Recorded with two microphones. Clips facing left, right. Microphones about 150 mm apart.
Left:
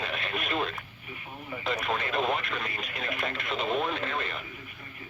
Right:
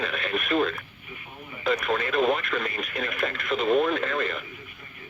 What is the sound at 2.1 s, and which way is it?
Speech, 25° left (ahead or behind).